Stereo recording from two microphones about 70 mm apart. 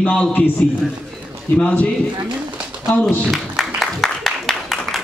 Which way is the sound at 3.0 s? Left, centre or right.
Centre.